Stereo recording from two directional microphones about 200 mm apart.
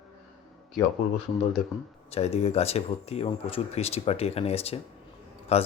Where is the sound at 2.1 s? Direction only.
30° left (ahead or behind).